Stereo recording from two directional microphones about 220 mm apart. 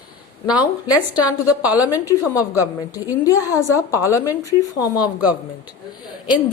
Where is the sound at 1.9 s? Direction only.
15° left (ahead or behind).